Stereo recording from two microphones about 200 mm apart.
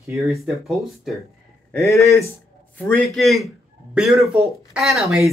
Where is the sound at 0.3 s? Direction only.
Centre (ahead or behind).